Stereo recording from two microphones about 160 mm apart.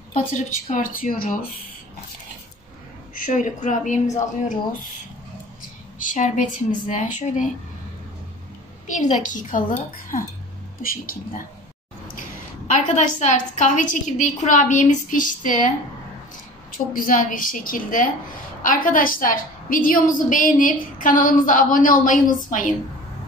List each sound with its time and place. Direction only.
0.1 s a woman's voice: 55° left (ahead or behind)
3.2 s a woman's voice: 55° left (ahead or behind)
5.9 s a woman's voice: 55° left (ahead or behind)
8.8 s a woman's voice: 50° left (ahead or behind)
10.8 s a woman's voice: 60° left (ahead or behind)
12.7 s a woman's voice: 50° left (ahead or behind)
16.7 s a woman's voice: 55° left (ahead or behind)